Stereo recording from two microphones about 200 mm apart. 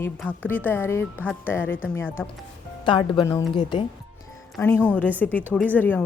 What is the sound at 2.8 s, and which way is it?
Speech, 25° left (ahead or behind).